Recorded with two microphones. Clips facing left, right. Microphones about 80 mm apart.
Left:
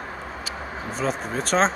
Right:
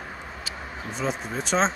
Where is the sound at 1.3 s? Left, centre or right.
Centre.